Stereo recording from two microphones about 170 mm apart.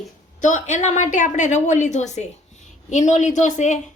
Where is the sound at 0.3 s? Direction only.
45° left (ahead or behind).